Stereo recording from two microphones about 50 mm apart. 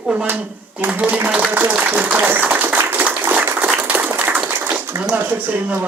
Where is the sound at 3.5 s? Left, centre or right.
Right.